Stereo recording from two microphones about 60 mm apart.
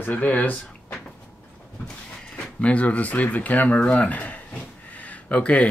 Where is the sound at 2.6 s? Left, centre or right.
Left.